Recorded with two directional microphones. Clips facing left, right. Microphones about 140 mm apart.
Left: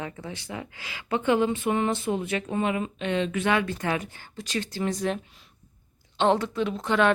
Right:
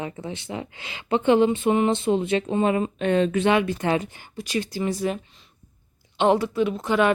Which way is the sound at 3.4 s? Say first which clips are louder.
Right 4 dB; 20° right (ahead or behind).